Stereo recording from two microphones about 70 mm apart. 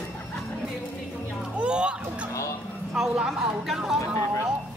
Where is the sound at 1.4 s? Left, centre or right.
Centre.